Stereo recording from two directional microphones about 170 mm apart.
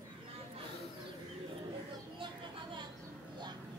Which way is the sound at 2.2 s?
30° right (ahead or behind).